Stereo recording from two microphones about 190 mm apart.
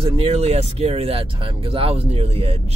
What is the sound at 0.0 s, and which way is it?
Speech, 30° right (ahead or behind).